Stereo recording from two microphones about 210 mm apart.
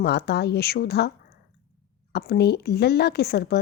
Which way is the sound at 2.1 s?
50° left (ahead or behind).